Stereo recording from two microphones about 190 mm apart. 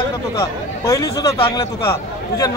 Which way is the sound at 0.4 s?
15° left (ahead or behind).